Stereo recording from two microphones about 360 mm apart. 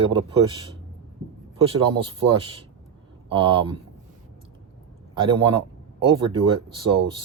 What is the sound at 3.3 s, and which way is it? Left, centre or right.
Speech, centre.